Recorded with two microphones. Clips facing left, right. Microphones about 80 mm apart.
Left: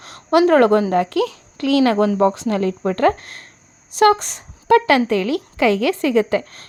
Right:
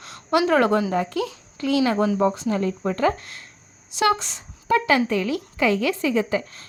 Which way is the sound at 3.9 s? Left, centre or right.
Left.